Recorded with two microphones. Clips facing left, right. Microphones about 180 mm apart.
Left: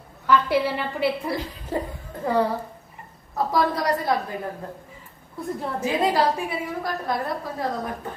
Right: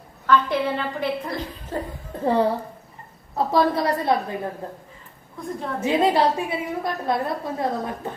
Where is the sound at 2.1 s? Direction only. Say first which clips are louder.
Right 5 dB; 30° right (ahead or behind).